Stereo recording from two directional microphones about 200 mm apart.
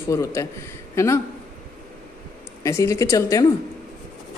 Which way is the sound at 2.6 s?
15° left (ahead or behind).